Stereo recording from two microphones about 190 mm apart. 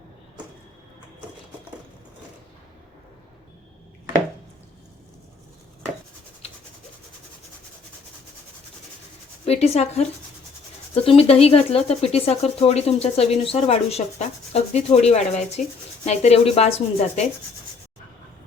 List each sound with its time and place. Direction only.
9.5 s speech: 30° left (ahead or behind)